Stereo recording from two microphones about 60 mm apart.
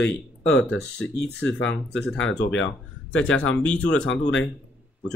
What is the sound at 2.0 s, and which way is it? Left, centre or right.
Speech, centre.